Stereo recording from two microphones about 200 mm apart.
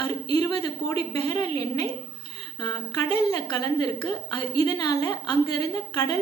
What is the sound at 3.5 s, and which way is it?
A woman's voice, 20° left (ahead or behind).